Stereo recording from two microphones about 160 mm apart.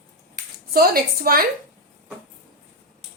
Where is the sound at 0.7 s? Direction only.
65° right (ahead or behind).